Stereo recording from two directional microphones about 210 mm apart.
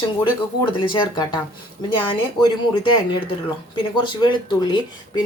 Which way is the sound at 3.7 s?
20° left (ahead or behind).